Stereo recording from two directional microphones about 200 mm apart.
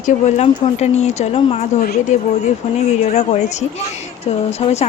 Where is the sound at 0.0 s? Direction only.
35° left (ahead or behind).